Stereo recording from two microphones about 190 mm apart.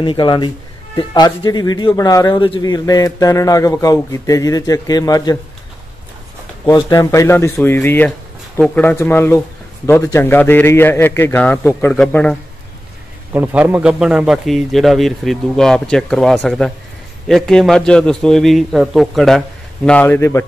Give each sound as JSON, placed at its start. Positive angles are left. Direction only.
{"t": 0.0, "sound": "speech", "side_deg": 25}
{"t": 6.6, "sound": "a man's voice", "side_deg": 15}
{"t": 13.3, "sound": "a man's voice", "side_deg": -10}